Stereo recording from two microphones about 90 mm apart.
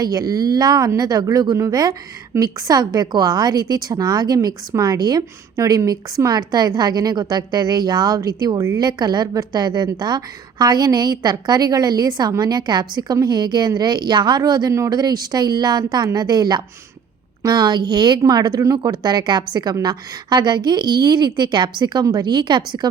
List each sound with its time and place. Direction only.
0.0 s a woman's voice: 45° right (ahead or behind)
8.8 s a woman's voice: 50° right (ahead or behind)
18.9 s a woman's voice: 50° right (ahead or behind)